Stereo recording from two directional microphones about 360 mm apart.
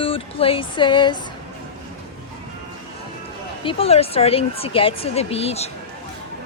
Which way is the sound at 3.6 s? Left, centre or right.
Centre.